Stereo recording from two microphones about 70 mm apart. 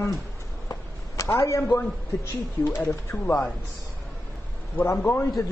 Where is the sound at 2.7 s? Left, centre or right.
Left.